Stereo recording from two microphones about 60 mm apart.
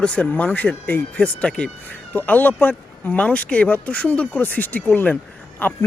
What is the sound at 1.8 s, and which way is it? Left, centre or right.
A man's voice, left.